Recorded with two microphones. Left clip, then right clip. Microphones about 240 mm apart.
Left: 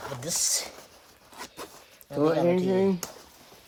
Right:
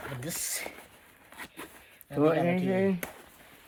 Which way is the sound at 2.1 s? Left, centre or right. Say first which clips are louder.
Left 2 dB; centre.